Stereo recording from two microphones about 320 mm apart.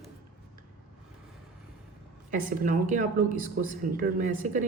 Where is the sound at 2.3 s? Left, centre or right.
Right.